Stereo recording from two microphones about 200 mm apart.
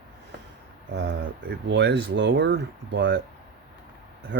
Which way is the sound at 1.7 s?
60° right (ahead or behind).